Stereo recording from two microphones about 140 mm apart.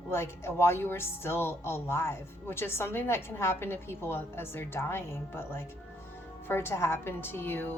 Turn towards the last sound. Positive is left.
turn(degrees=15)  # may be behind; listen again after turning